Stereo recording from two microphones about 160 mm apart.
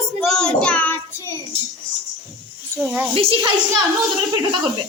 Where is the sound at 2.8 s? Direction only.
10° right (ahead or behind).